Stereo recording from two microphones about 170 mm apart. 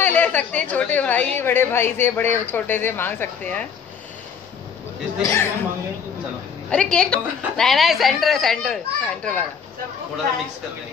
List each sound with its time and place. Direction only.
0.0 s a woman's voice: 10° left (ahead or behind)
5.2 s a woman's voice: 15° left (ahead or behind)
6.7 s a woman's voice: 5° left (ahead or behind)